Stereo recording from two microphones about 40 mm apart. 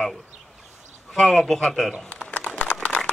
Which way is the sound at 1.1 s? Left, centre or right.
Centre.